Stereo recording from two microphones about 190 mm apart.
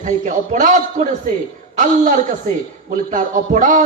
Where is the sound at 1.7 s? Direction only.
40° right (ahead or behind).